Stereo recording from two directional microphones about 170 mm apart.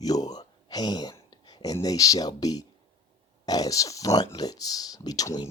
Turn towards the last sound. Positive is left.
turn(degrees=20)  # may be behind; listen again after turning